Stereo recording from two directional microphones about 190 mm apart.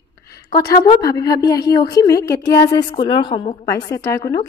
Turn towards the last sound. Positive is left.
turn(degrees=15)  # may be behind; listen again after turning